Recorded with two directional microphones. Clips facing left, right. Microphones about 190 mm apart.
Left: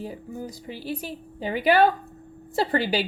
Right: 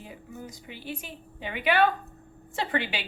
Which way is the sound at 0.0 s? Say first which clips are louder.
Left 8 dB; 35° left (ahead or behind).